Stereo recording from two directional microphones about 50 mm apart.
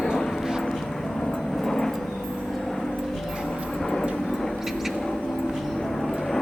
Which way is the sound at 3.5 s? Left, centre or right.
Centre.